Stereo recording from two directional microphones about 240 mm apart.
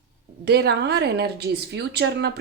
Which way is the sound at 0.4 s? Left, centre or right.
Right.